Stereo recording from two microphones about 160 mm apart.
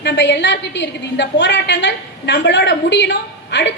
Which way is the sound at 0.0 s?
90° left.